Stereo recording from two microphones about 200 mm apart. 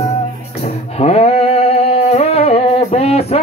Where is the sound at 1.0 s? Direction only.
30° left (ahead or behind).